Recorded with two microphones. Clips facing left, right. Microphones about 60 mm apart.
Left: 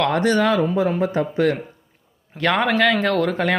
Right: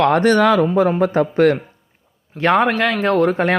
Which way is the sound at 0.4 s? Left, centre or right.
Right.